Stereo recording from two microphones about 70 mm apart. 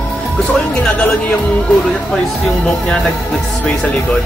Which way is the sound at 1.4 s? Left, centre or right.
Centre.